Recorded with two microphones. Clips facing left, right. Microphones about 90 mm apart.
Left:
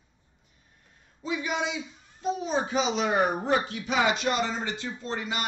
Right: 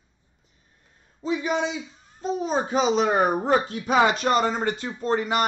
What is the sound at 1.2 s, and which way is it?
A man's voice, 35° right (ahead or behind).